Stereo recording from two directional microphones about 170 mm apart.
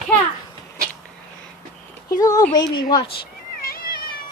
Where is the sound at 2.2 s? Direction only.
20° left (ahead or behind).